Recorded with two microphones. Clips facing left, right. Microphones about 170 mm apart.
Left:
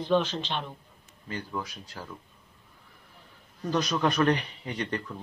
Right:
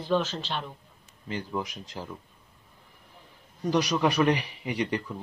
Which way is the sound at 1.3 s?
20° right (ahead or behind).